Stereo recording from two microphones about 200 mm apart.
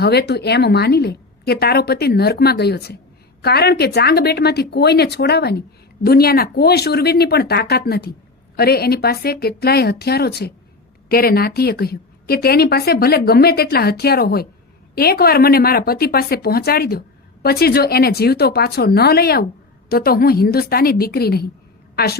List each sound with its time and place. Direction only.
0.0 s a woman's voice: 55° left (ahead or behind)